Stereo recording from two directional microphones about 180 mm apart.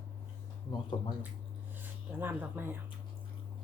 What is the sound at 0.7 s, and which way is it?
Speech, 30° left (ahead or behind).